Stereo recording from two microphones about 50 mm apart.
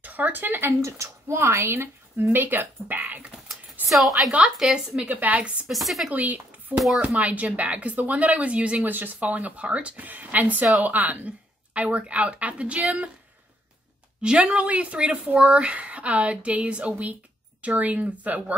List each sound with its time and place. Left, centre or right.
0.0 s a child's voice: right
3.9 s a woman's voice: centre
5.0 s a woman's voice: right
5.7 s a woman's voice: centre
6.1 s a woman's voice: right
8.8 s a woman's voice: right
14.4 s speech: right